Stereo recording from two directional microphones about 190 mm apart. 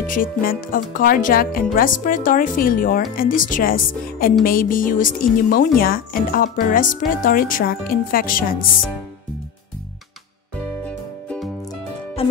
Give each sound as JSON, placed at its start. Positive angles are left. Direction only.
{"t": 0.0, "sound": "speech", "side_deg": 45}
{"t": 10.9, "sound": "music", "side_deg": 5}
{"t": 12.2, "sound": "music", "side_deg": 30}